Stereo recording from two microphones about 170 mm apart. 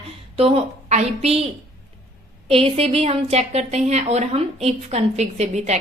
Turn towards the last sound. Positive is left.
turn(degrees=-40)  # may be behind; listen again after turning